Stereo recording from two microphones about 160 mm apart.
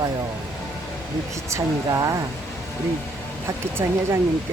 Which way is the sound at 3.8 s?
20° right (ahead or behind).